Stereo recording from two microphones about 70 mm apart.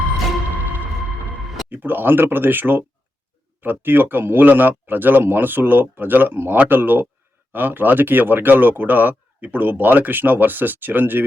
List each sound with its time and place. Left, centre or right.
1.7 s speech: right